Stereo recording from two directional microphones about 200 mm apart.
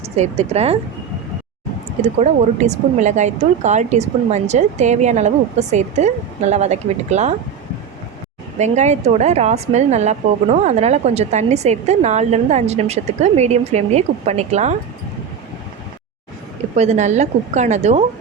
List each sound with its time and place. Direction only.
0.2 s speech: 30° right (ahead or behind)
2.0 s speech: 35° right (ahead or behind)
8.5 s speech: 35° right (ahead or behind)
16.7 s speech: 35° right (ahead or behind)